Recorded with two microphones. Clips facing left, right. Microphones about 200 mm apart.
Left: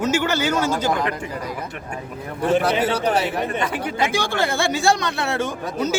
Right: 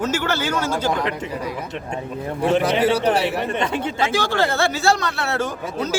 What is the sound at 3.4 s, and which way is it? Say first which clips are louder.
Speech: right 2 dB; 25° right (ahead or behind).